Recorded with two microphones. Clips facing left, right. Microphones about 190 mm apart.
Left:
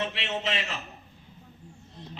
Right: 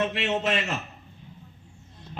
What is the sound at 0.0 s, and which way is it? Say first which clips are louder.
Speech: right 5 dB; 50° right (ahead or behind).